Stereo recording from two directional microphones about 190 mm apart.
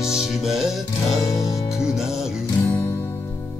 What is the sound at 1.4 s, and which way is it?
Music, 15° left (ahead or behind).